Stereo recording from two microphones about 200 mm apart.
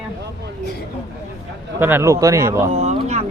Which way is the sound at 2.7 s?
35° right (ahead or behind).